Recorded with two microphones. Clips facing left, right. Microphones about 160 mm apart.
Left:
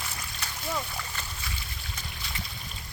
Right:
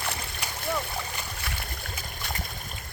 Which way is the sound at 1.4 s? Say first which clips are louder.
Right 4 dB; 60° right (ahead or behind).